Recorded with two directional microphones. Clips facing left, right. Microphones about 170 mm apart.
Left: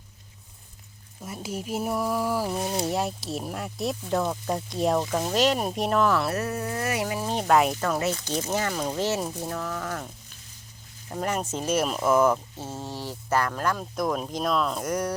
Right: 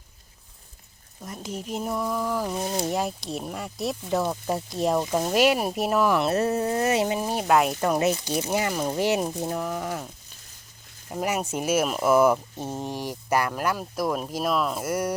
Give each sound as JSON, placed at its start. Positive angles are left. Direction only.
{"t": 1.2, "sound": "speech", "side_deg": 5}
{"t": 7.3, "sound": "speech", "side_deg": -5}
{"t": 7.8, "sound": "speech", "side_deg": -20}
{"t": 11.1, "sound": "speech", "side_deg": -10}